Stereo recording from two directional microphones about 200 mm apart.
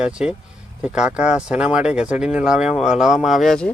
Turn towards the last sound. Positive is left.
turn(degrees=5)  # may be behind; listen again after turning